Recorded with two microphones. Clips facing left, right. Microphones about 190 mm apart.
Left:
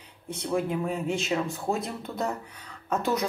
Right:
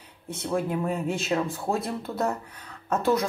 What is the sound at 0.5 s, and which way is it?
Speech, centre (ahead or behind).